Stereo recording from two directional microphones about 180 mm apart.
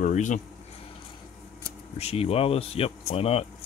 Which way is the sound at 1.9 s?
35° left (ahead or behind).